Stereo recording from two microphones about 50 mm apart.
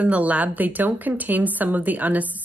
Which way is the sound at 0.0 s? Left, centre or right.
Right.